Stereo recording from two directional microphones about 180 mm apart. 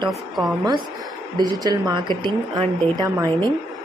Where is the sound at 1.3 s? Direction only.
20° right (ahead or behind).